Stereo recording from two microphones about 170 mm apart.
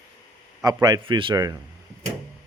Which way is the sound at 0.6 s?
25° right (ahead or behind).